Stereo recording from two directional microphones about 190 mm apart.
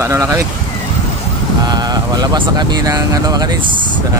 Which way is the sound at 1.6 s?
20° right (ahead or behind).